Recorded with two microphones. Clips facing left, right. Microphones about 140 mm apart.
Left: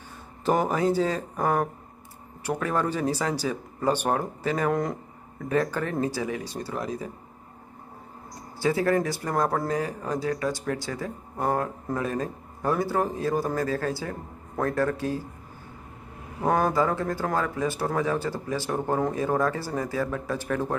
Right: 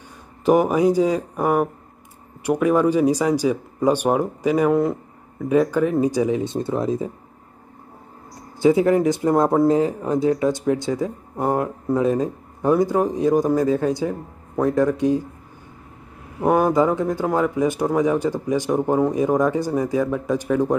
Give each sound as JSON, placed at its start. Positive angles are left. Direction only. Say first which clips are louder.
{"t": 0.5, "sound": "speech", "louder": "right 7 dB", "side_deg": -10}
{"t": 8.5, "sound": "speech", "louder": "right 7 dB", "side_deg": -20}
{"t": 16.3, "sound": "speech", "louder": "right 6 dB", "side_deg": -15}